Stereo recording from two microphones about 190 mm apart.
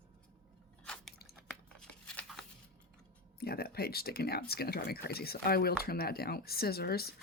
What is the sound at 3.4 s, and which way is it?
Speech, 55° left (ahead or behind).